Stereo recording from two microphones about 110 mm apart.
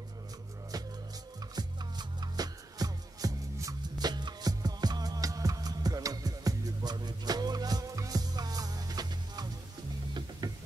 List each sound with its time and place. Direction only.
1.5 s music: 40° right (ahead or behind)
4.1 s music: 40° right (ahead or behind)